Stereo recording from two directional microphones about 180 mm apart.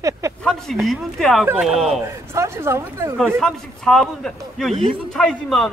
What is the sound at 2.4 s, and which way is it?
Speech, 15° right (ahead or behind).